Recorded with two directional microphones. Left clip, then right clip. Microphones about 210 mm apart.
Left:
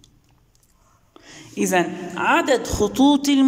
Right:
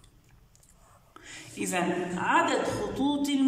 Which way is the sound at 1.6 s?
40° left (ahead or behind).